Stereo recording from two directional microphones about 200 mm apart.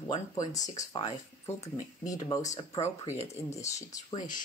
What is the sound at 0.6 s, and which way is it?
Speech, 35° left (ahead or behind).